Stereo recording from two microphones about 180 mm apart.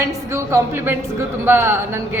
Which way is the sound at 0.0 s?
15° right (ahead or behind).